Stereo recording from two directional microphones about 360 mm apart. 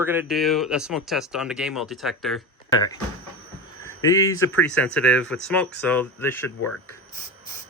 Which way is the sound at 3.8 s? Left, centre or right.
Centre.